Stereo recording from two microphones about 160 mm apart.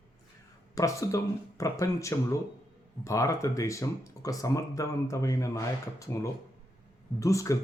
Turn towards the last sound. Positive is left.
turn(degrees=20)  # may be behind; listen again after turning